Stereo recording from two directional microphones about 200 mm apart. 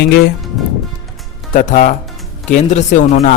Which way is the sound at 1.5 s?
40° left (ahead or behind).